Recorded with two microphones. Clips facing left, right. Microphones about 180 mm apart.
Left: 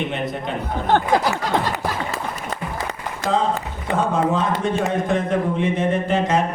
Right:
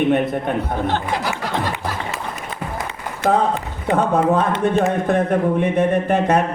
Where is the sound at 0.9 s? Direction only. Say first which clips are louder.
Left 4 dB; 40° left (ahead or behind).